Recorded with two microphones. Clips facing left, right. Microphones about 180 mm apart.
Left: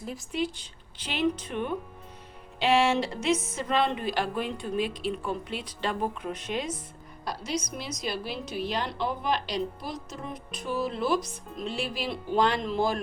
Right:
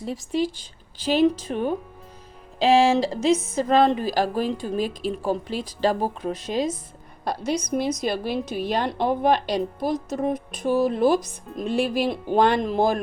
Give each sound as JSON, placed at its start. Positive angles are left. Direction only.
{"t": 1.1, "sound": "speech", "side_deg": -40}
{"t": 7.3, "sound": "a woman's voice", "side_deg": -50}